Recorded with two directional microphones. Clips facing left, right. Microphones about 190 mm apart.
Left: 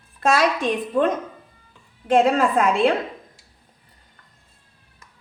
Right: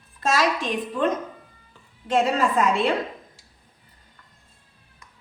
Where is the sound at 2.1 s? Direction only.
50° left (ahead or behind).